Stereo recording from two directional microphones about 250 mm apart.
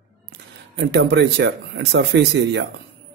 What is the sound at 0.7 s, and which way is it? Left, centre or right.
A man's voice, right.